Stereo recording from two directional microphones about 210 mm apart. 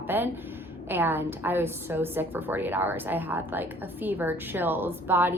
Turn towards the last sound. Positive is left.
turn(degrees=-10)  # may be behind; listen again after turning